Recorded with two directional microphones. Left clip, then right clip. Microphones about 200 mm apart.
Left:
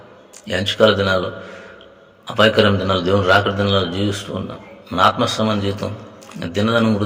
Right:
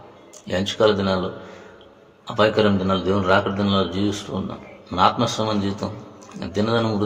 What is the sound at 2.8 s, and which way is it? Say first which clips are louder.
A man's voice: left 4 dB; 10° left (ahead or behind).